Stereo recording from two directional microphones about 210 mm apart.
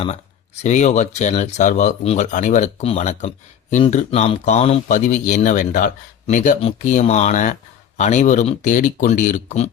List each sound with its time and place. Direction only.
0.0 s speech: 30° left (ahead or behind)